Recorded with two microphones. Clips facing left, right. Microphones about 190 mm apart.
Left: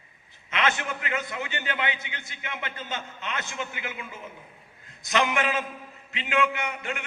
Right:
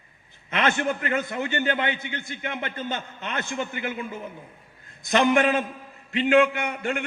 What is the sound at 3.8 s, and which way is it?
Speech, 40° right (ahead or behind).